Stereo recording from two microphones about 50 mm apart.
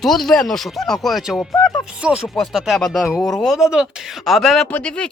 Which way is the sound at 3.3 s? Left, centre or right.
Centre.